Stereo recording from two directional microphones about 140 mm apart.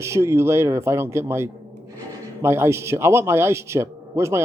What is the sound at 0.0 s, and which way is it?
A man's voice, 20° right (ahead or behind).